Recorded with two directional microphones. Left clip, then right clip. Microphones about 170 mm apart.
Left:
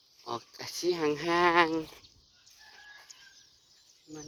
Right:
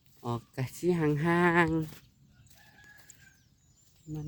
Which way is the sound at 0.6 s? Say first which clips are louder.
Even; 25° right (ahead or behind).